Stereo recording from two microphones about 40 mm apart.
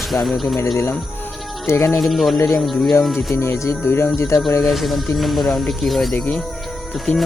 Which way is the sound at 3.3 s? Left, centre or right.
Left.